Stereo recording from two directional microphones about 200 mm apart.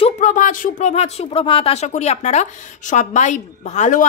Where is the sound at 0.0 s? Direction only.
40° left (ahead or behind).